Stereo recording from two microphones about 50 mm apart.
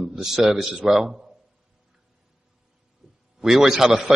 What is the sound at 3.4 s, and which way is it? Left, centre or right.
Speech, centre.